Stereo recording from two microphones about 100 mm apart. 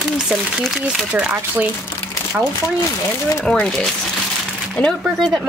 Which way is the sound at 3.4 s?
5° left (ahead or behind).